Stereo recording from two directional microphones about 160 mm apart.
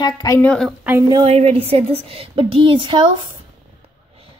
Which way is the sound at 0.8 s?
15° right (ahead or behind).